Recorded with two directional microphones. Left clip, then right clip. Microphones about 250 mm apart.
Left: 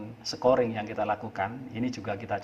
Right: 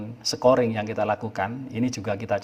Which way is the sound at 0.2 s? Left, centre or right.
Right.